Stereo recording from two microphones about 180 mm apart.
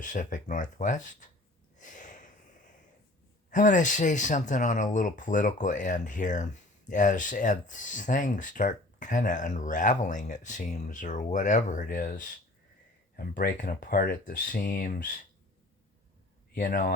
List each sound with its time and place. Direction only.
0.0 s speech: 45° left (ahead or behind)
1.8 s a sound: 45° left (ahead or behind)
3.5 s speech: 45° left (ahead or behind)
16.6 s speech: 50° left (ahead or behind)